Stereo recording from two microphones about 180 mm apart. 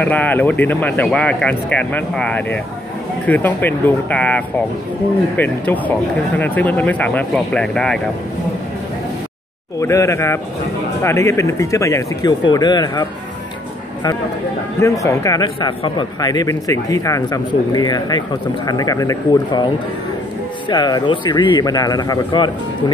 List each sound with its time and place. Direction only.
0.0 s speech: 10° left (ahead or behind)
9.8 s speech: 15° left (ahead or behind)
14.8 s a man's voice: 15° left (ahead or behind)